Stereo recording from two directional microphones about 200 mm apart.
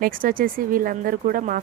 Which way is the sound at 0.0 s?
45° right (ahead or behind).